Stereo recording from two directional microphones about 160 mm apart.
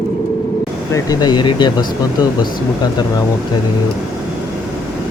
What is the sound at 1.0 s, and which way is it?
Speech, 25° left (ahead or behind).